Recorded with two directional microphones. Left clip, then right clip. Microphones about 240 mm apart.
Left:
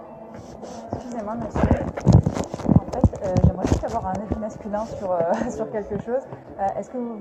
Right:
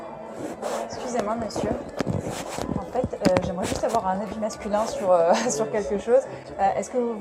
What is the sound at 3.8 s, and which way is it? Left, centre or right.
A woman's voice, right.